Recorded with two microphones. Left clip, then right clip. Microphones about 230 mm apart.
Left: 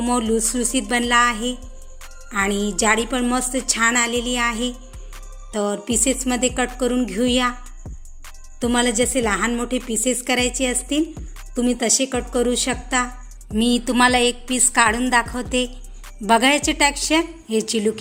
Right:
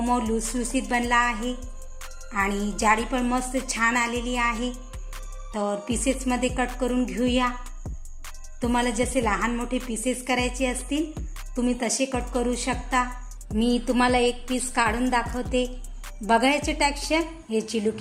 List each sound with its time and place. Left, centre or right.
0.0 s music: left
8.6 s music: left